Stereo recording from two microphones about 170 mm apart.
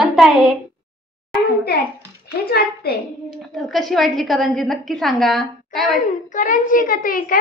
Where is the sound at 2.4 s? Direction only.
65° left (ahead or behind).